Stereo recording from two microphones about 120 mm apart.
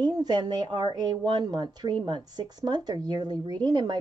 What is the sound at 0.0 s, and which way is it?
Speech, 35° right (ahead or behind).